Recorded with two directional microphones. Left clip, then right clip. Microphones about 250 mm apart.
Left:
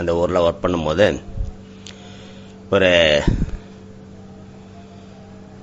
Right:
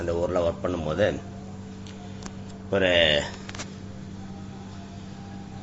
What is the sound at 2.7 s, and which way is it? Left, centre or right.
Speech, left.